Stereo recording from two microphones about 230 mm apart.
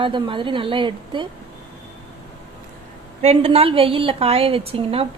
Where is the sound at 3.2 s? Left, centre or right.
Right.